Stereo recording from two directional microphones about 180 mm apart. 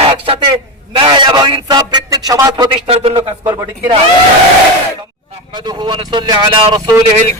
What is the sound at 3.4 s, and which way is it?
Speech, 15° right (ahead or behind).